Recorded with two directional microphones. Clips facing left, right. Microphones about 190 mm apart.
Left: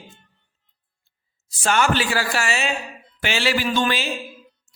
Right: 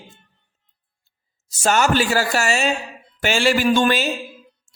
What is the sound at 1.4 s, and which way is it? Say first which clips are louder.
Speech: right 2 dB; 40° right (ahead or behind).